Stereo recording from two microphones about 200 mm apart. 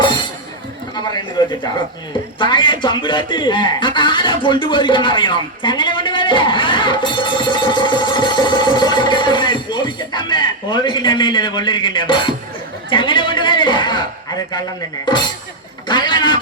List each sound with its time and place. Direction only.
0.9 s a man's voice: 20° left (ahead or behind)